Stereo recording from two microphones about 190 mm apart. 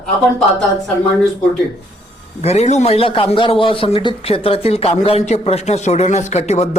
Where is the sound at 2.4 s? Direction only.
35° left (ahead or behind).